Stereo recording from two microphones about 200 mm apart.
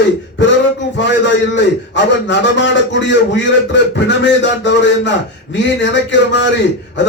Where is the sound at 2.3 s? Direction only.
65° left (ahead or behind).